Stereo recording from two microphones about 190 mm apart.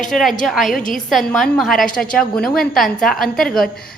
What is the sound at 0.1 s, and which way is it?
A woman's voice, centre (ahead or behind).